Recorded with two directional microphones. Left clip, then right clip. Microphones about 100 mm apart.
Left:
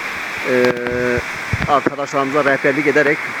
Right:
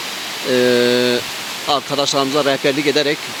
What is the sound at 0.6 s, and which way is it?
Mantra, 40° right (ahead or behind).